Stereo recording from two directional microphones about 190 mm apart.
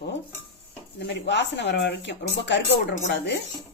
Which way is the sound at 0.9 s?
60° left (ahead or behind).